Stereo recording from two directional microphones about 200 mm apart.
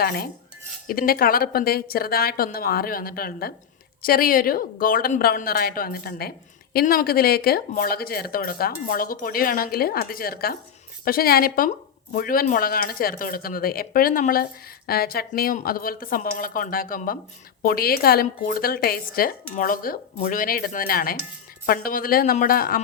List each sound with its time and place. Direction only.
0.0 s speech: 50° left (ahead or behind)